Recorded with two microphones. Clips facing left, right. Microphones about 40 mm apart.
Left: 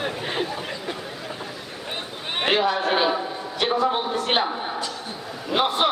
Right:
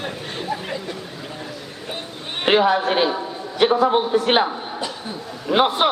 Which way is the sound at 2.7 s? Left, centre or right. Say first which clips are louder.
Right 2 dB; centre.